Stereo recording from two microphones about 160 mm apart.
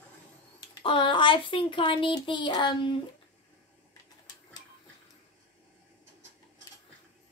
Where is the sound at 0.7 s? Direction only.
30° left (ahead or behind).